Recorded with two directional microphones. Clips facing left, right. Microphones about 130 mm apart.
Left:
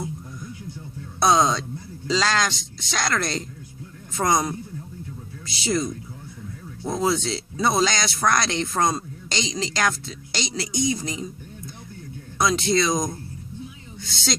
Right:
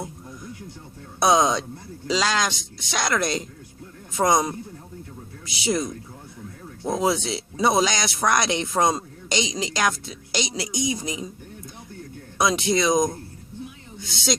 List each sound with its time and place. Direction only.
1.2 s speech: 15° right (ahead or behind)
12.4 s speech: 15° right (ahead or behind)